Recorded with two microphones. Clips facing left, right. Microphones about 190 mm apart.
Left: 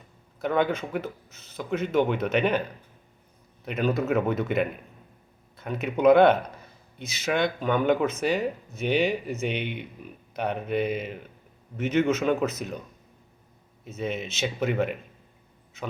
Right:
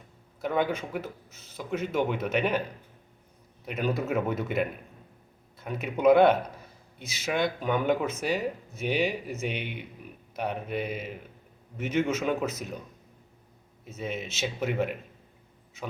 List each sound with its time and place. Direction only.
0.4 s speech: 5° right (ahead or behind)
3.7 s speech: 10° right (ahead or behind)
13.8 s speech: 5° right (ahead or behind)